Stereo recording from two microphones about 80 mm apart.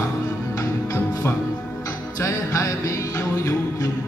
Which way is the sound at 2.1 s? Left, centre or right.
Left.